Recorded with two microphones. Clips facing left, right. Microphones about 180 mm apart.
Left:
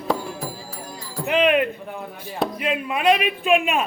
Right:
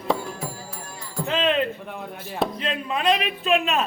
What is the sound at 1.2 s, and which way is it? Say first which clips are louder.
Speech: left 4 dB; 15° left (ahead or behind).